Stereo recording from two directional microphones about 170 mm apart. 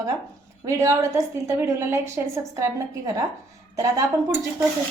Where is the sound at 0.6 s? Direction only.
20° right (ahead or behind).